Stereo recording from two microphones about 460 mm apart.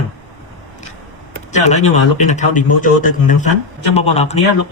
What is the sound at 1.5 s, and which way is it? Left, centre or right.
Speech, centre.